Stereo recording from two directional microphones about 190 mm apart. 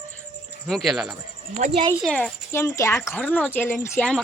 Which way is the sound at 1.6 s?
40° right (ahead or behind).